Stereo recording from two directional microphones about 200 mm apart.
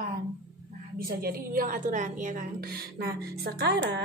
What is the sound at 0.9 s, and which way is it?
A woman's voice, 45° right (ahead or behind).